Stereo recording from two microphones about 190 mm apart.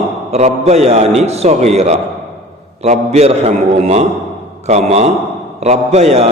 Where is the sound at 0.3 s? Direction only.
35° right (ahead or behind).